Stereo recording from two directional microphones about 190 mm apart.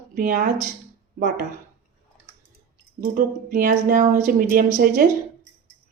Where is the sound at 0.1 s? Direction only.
50° right (ahead or behind).